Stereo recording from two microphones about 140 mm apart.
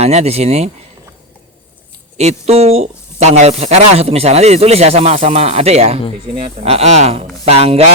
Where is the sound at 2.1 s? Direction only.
50° right (ahead or behind).